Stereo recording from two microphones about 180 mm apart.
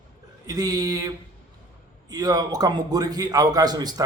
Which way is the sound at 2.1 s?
20° right (ahead or behind).